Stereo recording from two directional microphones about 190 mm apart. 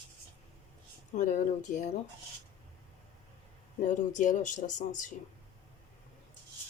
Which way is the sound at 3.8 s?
40° left (ahead or behind).